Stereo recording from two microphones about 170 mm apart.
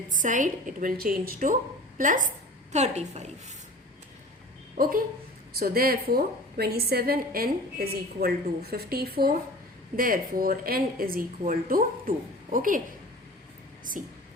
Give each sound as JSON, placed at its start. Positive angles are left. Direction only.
{"t": 0.2, "sound": "a woman's voice", "side_deg": -50}
{"t": 4.8, "sound": "a woman's voice", "side_deg": -55}